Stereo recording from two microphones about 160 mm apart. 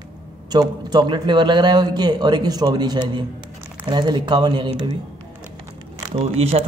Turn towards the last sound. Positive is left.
turn(degrees=-40)  # may be behind; listen again after turning